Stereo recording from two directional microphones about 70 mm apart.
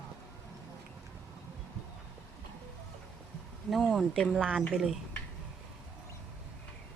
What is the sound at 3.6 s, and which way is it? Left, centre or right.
Speech, centre.